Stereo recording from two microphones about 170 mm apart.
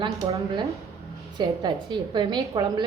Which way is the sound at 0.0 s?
25° right (ahead or behind).